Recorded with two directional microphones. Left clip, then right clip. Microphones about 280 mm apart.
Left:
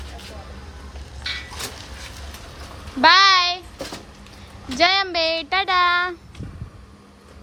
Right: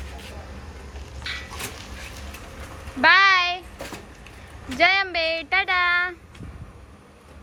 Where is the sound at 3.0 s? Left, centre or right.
Centre.